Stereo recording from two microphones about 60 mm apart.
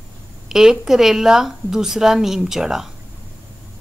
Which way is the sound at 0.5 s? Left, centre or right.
Centre.